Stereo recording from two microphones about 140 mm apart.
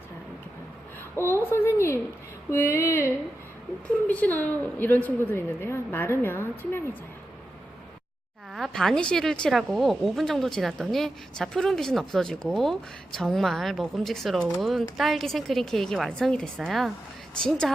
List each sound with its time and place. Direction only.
1.1 s a woman's voice: 15° left (ahead or behind)
2.5 s female singing: 20° left (ahead or behind)
4.0 s a woman's voice: 10° left (ahead or behind)
8.5 s speech: centre (ahead or behind)